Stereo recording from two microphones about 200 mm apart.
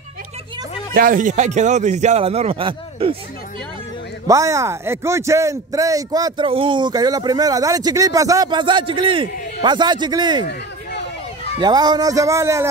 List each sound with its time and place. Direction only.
0.9 s speech: 40° right (ahead or behind); by 3.2 s 25° right (ahead or behind)
4.3 s speech: 15° right (ahead or behind)
11.6 s a man's voice: 20° right (ahead or behind)